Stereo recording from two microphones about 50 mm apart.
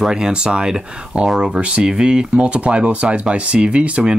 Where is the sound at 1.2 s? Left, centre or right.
Centre.